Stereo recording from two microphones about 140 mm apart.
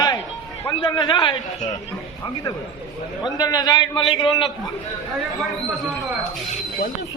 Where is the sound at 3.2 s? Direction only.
30° left (ahead or behind).